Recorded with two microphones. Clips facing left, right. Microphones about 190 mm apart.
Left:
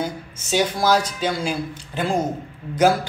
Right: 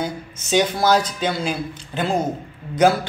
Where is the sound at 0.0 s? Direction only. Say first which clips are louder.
Right 1 dB; 5° left (ahead or behind).